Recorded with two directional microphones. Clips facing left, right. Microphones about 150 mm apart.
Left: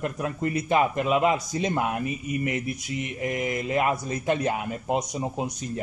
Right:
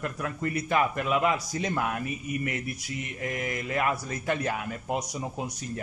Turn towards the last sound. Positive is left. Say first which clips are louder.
# left 4 dB
turn(degrees=25)  # may be behind; listen again after turning